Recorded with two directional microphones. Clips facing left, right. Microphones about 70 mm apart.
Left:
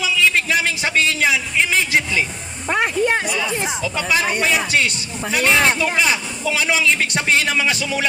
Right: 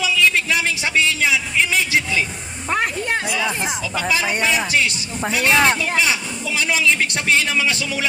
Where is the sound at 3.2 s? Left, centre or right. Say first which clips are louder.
Even; right.